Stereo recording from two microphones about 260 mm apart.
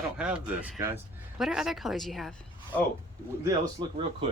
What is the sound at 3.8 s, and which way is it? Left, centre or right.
Speech, centre.